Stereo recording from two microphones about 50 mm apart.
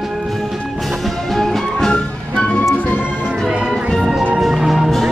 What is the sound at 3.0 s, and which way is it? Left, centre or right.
Music, centre.